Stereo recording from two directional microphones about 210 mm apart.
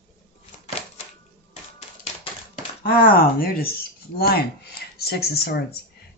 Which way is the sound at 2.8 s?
45° left (ahead or behind).